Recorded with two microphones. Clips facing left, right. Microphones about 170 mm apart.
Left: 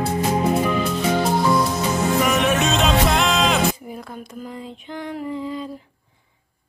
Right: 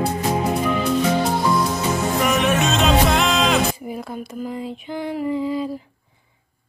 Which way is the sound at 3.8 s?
10° right (ahead or behind).